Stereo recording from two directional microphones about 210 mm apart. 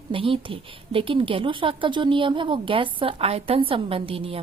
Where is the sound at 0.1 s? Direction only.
25° right (ahead or behind).